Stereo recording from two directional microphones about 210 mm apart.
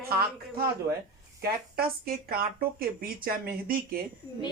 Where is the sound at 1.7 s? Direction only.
45° right (ahead or behind).